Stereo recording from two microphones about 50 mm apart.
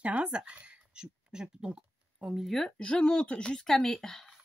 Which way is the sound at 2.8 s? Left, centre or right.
Centre.